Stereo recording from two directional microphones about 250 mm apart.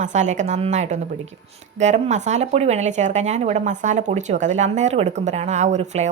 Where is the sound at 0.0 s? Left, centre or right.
Right.